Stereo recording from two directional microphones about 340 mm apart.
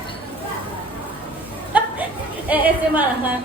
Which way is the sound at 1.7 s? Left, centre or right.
Centre.